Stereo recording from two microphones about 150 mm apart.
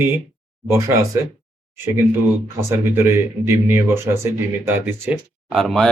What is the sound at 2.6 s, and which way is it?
Speech, 15° right (ahead or behind).